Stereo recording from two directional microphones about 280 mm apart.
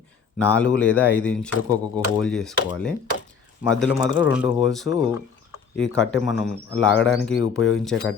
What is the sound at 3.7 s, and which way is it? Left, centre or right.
Speech, centre.